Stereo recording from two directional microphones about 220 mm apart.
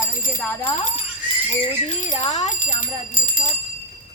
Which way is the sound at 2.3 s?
35° left (ahead or behind).